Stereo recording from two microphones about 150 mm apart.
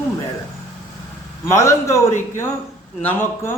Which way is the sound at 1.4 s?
20° left (ahead or behind).